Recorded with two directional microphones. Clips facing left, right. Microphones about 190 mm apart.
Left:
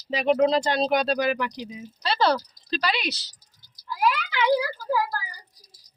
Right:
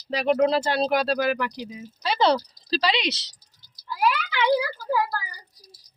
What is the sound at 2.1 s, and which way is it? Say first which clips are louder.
Speech: right 2 dB; 20° right (ahead or behind).